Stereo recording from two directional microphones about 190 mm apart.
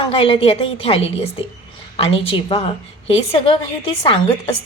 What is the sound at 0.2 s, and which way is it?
A woman's voice, 30° left (ahead or behind).